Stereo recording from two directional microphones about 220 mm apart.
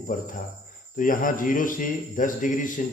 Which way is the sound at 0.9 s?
40° left (ahead or behind).